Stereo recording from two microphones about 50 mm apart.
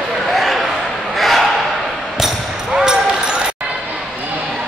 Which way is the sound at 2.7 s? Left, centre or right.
Centre.